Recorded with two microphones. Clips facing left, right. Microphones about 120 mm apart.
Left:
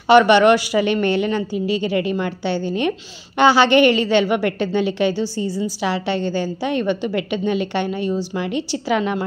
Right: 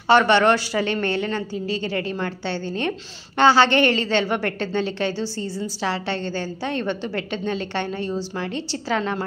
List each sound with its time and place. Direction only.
0.1 s a woman's voice: 15° left (ahead or behind)